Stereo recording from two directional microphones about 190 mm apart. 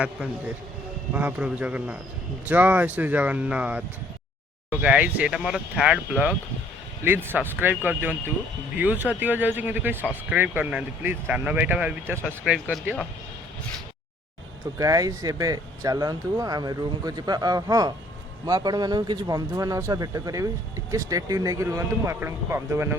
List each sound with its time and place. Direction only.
0.0 s speech: 5° right (ahead or behind)
14.8 s speech: 20° right (ahead or behind)